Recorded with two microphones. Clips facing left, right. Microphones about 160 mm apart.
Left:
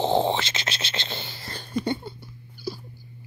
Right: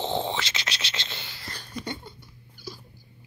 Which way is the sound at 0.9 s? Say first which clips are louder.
Left 5 dB; 30° left (ahead or behind).